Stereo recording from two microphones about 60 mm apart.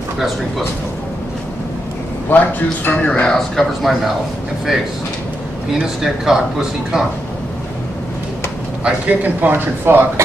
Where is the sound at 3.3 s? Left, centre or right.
Centre.